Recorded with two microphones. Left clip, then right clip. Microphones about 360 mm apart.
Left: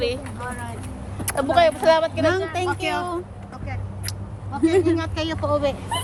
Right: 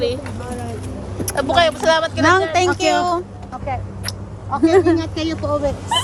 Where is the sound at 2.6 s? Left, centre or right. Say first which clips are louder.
Right 8 dB; right.